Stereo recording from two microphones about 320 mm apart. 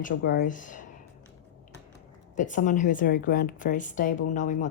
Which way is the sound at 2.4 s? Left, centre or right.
Left.